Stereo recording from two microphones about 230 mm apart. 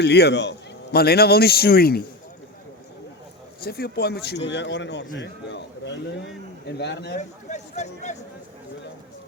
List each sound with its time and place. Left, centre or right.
0.0 s a man's voice: left
3.6 s a man's voice: left
7.2 s speech: left